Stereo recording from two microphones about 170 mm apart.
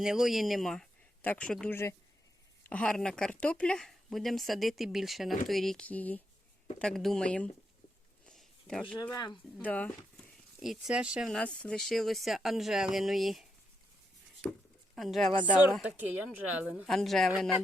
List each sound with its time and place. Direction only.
0.0 s speech: centre (ahead or behind)
8.3 s a sound: centre (ahead or behind)
9.1 s speech: 25° left (ahead or behind)
9.6 s speech: 10° left (ahead or behind)
10.6 s speech: 5° right (ahead or behind)
14.9 s speech: centre (ahead or behind)
15.7 s speech: 10° right (ahead or behind)
16.7 s speech: centre (ahead or behind)